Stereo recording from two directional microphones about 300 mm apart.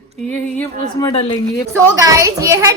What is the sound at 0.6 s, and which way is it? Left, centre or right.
Speech, centre.